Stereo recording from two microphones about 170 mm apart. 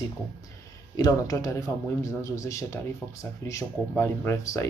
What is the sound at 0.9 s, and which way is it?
Speech, 20° left (ahead or behind).